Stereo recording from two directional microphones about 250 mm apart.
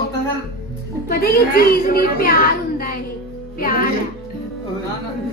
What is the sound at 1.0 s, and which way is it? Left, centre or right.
A child's voice, left.